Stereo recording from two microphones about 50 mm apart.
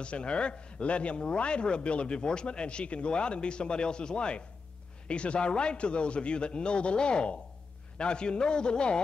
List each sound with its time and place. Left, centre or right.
0.0 s speech: left